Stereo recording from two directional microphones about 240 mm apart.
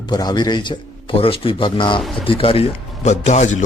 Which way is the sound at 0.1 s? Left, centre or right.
Centre.